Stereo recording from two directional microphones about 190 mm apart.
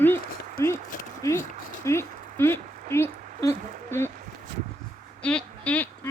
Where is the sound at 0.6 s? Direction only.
15° left (ahead or behind).